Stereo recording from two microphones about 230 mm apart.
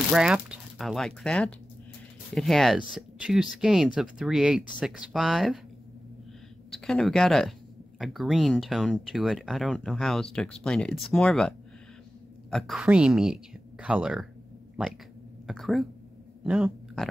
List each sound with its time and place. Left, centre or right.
0.1 s speech: centre
6.7 s a woman's voice: centre
15.4 s speech: centre